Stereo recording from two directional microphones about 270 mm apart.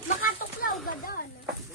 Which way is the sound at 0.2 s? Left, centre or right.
Left.